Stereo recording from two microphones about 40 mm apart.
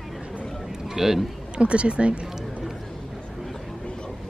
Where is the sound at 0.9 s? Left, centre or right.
Centre.